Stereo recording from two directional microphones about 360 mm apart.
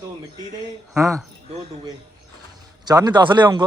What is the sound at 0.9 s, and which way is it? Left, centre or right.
Speech, centre.